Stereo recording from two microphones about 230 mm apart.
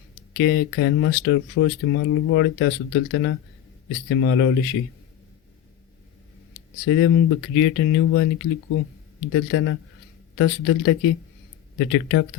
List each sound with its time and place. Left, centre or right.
0.3 s speech: left
6.8 s speech: left
9.3 s speech: left